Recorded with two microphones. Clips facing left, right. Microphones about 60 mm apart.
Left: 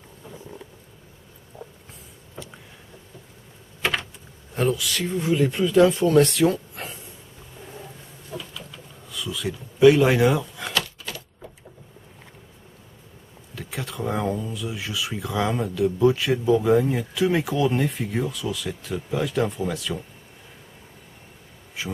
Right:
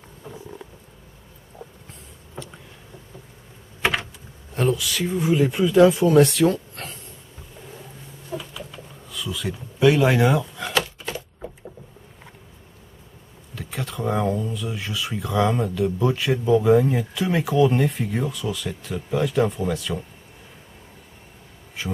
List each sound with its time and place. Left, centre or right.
3.8 s a sound: centre
4.6 s speech: centre
8.4 s a sound: centre
9.1 s speech: centre
10.7 s typewriter: right
13.6 s speech: centre
21.8 s insect: centre